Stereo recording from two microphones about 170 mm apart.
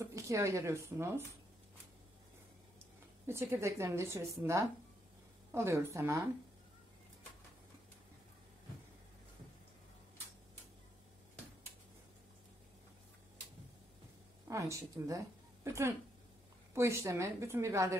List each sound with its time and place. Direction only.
0.0 s speech: 15° right (ahead or behind)
3.3 s a woman's voice: 15° right (ahead or behind)
14.5 s a woman's voice: 20° right (ahead or behind)